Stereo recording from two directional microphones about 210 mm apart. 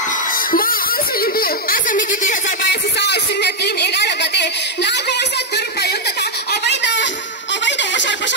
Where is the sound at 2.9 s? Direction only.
55° left (ahead or behind).